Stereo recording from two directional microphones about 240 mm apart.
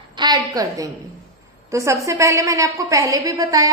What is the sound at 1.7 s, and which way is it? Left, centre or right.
A woman's voice, centre.